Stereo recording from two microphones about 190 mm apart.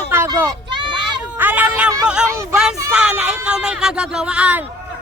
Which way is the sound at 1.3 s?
10° right (ahead or behind).